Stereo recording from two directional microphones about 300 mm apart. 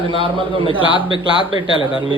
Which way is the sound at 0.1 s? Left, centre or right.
Centre.